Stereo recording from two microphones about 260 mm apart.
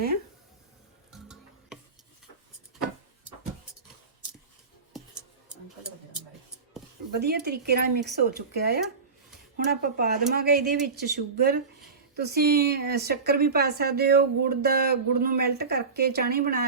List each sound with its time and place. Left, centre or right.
1.1 s stir: centre
4.9 s tick-tock: centre
7.2 s a woman's voice: right